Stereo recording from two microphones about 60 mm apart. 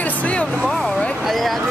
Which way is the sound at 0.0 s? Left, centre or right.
Left.